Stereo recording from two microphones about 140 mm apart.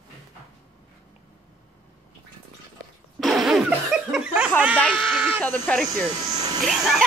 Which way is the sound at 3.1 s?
Centre (ahead or behind).